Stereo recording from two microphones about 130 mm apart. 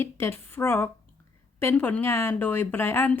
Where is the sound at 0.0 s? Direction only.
20° left (ahead or behind).